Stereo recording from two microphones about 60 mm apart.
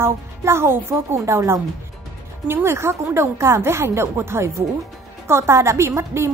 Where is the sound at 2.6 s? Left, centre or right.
Right.